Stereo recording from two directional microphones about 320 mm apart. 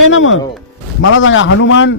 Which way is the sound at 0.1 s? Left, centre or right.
Left.